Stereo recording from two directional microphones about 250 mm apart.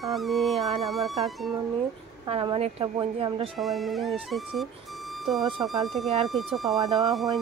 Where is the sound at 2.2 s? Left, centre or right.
Centre.